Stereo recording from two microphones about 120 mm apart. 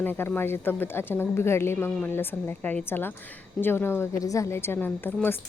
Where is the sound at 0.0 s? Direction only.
20° left (ahead or behind).